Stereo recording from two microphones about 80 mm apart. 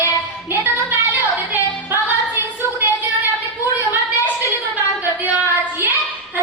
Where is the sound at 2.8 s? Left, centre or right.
Right.